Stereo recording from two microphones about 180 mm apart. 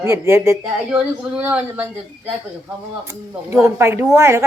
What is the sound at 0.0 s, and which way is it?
A woman's voice, 15° right (ahead or behind).